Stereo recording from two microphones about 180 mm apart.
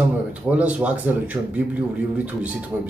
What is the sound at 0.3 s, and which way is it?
Speech, 5° right (ahead or behind).